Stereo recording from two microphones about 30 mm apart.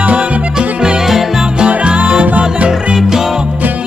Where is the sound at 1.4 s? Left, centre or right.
Right.